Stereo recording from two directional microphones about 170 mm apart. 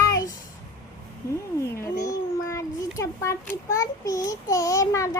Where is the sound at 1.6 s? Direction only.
20° left (ahead or behind).